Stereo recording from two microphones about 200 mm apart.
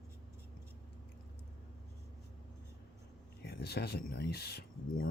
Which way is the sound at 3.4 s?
50° left (ahead or behind).